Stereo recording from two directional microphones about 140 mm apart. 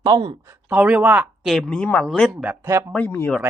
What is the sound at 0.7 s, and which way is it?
Speech, 10° right (ahead or behind).